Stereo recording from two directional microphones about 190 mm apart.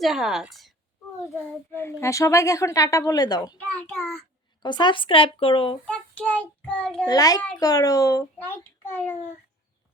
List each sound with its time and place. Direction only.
0.0 s a woman's voice: centre (ahead or behind)
1.5 s a woman's voice: 10° left (ahead or behind)
3.8 s a woman's voice: 10° left (ahead or behind)
4.6 s a child's voice: 25° left (ahead or behind)
5.8 s a woman's voice: 5° left (ahead or behind)
7.1 s a child's voice: 20° left (ahead or behind)